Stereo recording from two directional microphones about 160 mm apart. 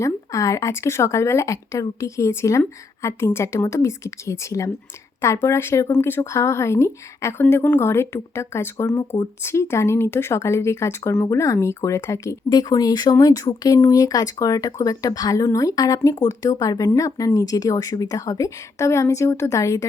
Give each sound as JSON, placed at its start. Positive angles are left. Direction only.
{"t": 0.0, "sound": "speech", "side_deg": 20}